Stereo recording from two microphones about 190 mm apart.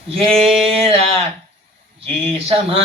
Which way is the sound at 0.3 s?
30° right (ahead or behind).